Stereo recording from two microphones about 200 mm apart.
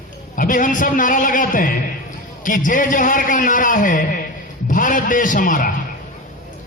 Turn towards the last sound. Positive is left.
turn(degrees=40)  # may be behind; listen again after turning